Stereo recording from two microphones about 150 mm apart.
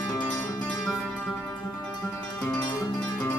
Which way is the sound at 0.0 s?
10° left (ahead or behind).